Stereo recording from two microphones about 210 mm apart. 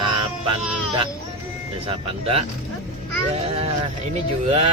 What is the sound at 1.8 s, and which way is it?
Speech, 30° right (ahead or behind).